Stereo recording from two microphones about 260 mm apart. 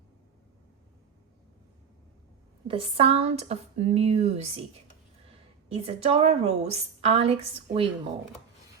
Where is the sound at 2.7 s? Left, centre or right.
Right.